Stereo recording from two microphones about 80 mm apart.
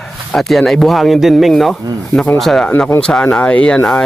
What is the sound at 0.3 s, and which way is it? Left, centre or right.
Speech, centre.